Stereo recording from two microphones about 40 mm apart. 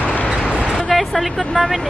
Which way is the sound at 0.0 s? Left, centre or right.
Left.